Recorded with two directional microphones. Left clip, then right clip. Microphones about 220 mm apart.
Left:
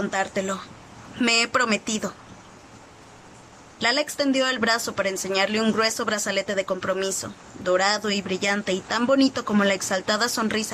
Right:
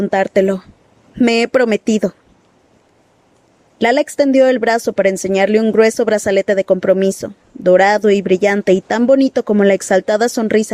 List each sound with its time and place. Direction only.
0.0 s speech: 35° right (ahead or behind)
3.8 s speech: 35° right (ahead or behind)